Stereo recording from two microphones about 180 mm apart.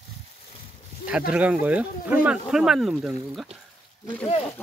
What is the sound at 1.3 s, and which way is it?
Speech, 5° right (ahead or behind).